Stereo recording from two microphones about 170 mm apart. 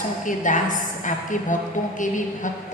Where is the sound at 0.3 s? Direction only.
50° left (ahead or behind).